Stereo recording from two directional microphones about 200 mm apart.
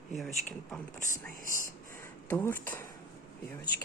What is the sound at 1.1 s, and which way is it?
Speech, 45° left (ahead or behind).